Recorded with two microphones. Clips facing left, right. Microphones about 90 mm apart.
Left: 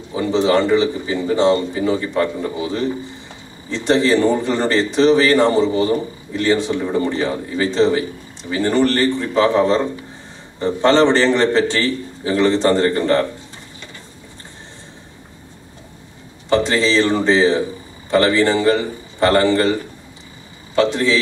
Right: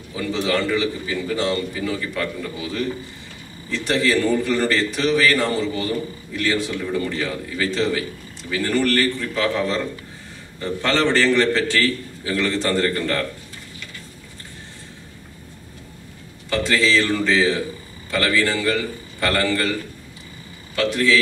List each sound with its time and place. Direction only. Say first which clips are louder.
0.1 s a man's voice: left 7 dB; 25° left (ahead or behind)
16.4 s a man's voice: left 4 dB; 25° left (ahead or behind)